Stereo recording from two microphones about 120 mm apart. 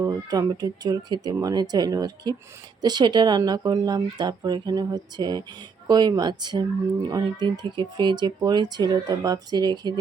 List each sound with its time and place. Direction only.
0.0 s speech: 30° right (ahead or behind)